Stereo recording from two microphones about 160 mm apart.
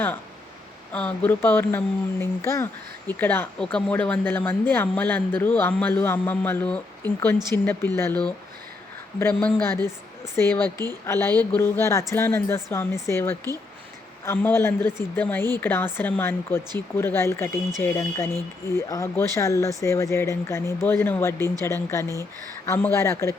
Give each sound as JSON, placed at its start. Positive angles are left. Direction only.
{"t": 0.9, "sound": "speech", "side_deg": 10}